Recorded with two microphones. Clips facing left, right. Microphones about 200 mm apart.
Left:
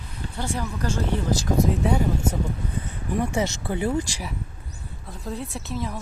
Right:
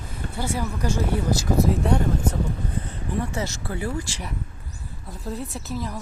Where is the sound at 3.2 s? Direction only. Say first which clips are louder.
Left 4 dB; 15° left (ahead or behind).